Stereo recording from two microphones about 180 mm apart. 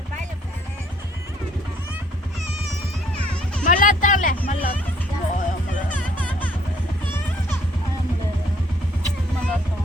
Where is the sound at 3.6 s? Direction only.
45° left (ahead or behind).